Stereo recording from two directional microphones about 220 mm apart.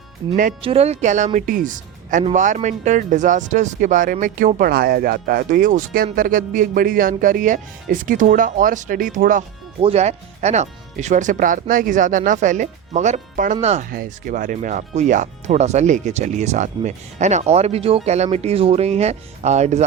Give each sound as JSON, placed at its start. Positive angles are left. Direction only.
{"t": 0.6, "sound": "speech", "side_deg": -25}